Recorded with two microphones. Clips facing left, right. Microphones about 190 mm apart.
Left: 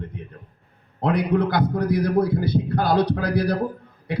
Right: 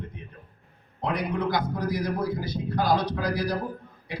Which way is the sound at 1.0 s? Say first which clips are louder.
Left 7 dB; 60° left (ahead or behind).